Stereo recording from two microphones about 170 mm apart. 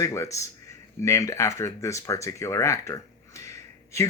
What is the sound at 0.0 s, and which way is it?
Speech, 15° left (ahead or behind).